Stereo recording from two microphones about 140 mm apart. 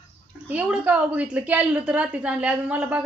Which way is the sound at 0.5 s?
10° right (ahead or behind).